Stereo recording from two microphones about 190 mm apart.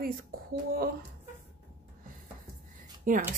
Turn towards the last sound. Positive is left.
turn(degrees=-45)  # may be behind; listen again after turning